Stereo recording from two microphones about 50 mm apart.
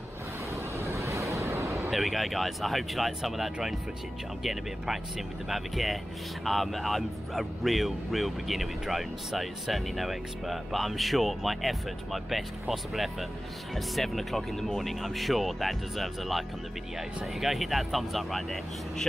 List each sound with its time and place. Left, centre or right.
0.7 s vehicle: right
1.9 s speech: centre